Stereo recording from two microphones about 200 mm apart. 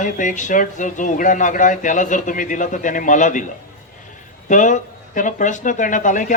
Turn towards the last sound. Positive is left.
turn(degrees=40)  # may be behind; listen again after turning